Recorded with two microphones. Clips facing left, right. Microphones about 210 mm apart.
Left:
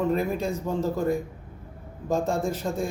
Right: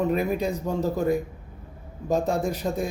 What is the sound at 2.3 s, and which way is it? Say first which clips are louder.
Speech: right 1 dB; 15° right (ahead or behind).